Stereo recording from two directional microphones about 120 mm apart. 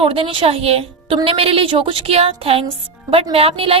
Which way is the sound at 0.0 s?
50° right (ahead or behind).